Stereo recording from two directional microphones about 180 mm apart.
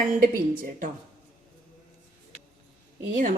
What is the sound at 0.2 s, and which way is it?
Speech, 50° right (ahead or behind).